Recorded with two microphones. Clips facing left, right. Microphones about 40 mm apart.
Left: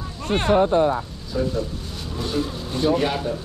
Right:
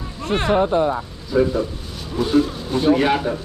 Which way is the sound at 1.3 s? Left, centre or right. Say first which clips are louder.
Right 7 dB; right.